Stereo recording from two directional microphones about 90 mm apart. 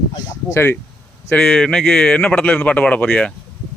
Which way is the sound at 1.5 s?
5° left (ahead or behind).